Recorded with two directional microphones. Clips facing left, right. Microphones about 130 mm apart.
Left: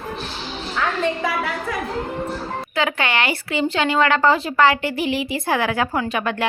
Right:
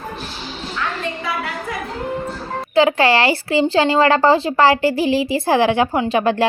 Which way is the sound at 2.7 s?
30° right (ahead or behind).